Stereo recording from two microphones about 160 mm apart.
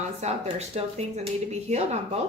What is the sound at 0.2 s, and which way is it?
Speech, 40° right (ahead or behind).